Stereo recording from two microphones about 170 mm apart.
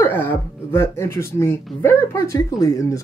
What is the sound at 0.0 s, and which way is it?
Speech, 15° left (ahead or behind).